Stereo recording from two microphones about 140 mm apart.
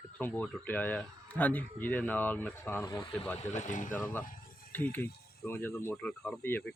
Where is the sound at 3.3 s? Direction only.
55° left (ahead or behind).